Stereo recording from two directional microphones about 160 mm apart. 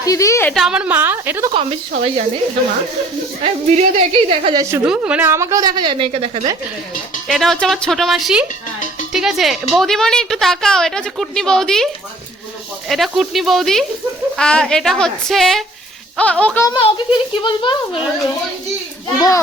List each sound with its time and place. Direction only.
0.0 s a woman's voice: 20° left (ahead or behind)
0.5 s a woman's voice: 5° right (ahead or behind)
1.5 s a woman's voice: 35° right (ahead or behind)
3.4 s a woman's voice: 40° right (ahead or behind)
4.5 s a woman's voice: 20° right (ahead or behind)
4.9 s a woman's voice: 10° right (ahead or behind); by 6.5 s 40° right (ahead or behind)
7.3 s a woman's voice: centre (ahead or behind)
12.9 s a woman's voice: centre (ahead or behind)
16.6 s a child's voice: 30° left (ahead or behind)